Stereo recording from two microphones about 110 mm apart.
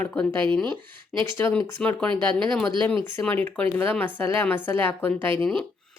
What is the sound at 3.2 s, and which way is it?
Speech, 15° left (ahead or behind).